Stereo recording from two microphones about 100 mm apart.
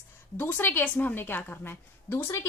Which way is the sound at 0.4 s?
25° left (ahead or behind).